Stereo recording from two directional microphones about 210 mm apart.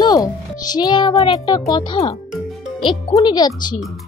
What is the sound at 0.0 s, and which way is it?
A child's voice, 20° left (ahead or behind).